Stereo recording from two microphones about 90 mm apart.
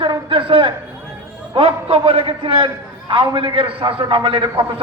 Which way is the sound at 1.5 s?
85° right.